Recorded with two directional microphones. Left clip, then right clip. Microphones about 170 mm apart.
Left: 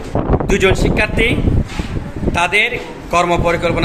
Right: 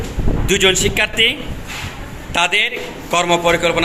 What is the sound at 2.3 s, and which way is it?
A man's voice, centre (ahead or behind).